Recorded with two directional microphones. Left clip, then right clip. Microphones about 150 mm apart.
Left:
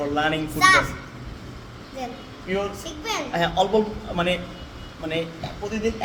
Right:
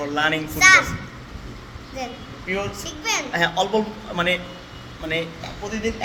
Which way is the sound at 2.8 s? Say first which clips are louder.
Right 3 dB; 30° left (ahead or behind).